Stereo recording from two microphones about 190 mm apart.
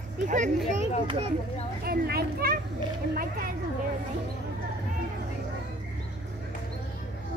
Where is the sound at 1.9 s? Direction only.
55° right (ahead or behind).